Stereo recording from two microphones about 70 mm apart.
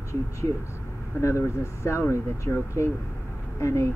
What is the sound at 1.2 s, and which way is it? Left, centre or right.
Speech, left.